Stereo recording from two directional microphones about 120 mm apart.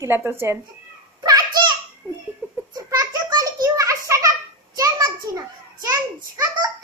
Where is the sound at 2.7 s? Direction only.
30° right (ahead or behind).